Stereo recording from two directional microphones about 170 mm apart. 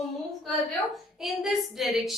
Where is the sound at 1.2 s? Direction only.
Centre (ahead or behind).